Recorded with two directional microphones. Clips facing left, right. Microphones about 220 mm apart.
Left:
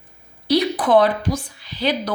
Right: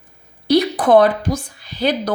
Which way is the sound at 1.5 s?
50° right (ahead or behind).